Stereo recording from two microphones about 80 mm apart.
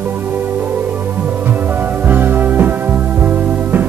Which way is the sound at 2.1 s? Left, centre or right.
Right.